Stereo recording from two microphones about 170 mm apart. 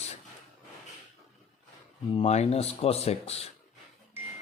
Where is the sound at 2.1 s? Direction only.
40° left (ahead or behind).